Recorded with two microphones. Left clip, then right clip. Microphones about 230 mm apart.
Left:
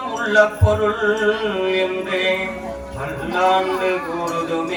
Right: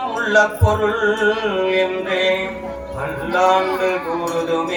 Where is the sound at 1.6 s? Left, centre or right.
Centre.